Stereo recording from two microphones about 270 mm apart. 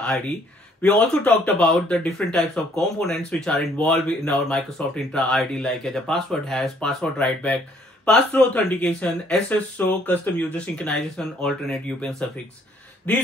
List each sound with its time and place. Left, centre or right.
0.8 s speech: centre